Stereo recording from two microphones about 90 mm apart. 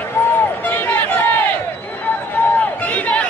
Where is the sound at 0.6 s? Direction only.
20° left (ahead or behind).